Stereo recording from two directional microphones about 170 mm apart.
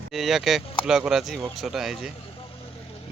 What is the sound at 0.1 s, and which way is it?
Speech, centre (ahead or behind).